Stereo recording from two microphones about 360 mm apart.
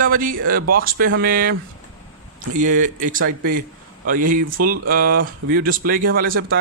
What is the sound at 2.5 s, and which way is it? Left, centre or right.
Speech, right.